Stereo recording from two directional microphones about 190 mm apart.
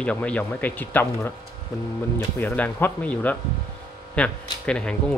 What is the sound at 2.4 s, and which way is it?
Speech, 10° left (ahead or behind).